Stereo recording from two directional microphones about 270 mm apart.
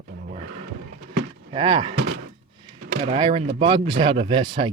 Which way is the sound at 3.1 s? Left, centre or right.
Centre.